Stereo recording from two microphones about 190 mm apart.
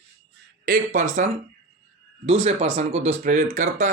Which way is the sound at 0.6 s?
45° right (ahead or behind).